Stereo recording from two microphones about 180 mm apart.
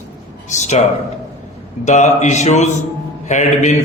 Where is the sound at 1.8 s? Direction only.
40° left (ahead or behind).